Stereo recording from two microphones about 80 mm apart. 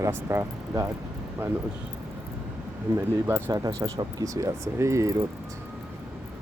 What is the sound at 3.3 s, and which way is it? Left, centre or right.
Speech, right.